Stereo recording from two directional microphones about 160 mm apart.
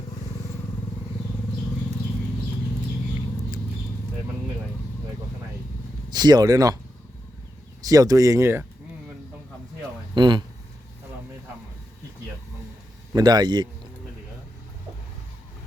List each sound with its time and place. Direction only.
6.1 s speech: 25° right (ahead or behind)
7.8 s speech: 20° right (ahead or behind)
10.2 s speech: 30° right (ahead or behind)
13.1 s speech: 25° right (ahead or behind)